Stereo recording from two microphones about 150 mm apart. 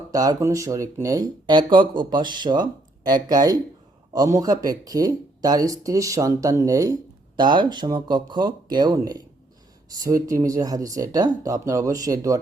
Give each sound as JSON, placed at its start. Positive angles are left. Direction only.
{"t": 0.1, "sound": "speech", "side_deg": -25}